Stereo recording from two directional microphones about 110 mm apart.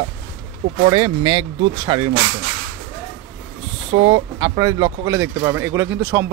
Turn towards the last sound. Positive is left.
turn(degrees=-20)  # may be behind; listen again after turning